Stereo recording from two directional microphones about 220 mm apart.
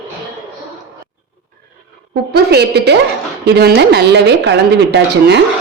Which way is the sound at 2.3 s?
45° right (ahead or behind).